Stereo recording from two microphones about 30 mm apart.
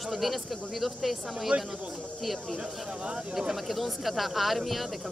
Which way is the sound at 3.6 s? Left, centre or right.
Centre.